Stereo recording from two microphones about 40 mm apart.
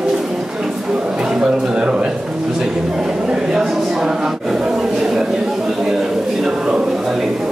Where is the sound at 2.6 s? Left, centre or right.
Right.